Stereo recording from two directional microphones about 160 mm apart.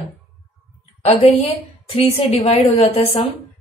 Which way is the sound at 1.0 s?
40° left (ahead or behind).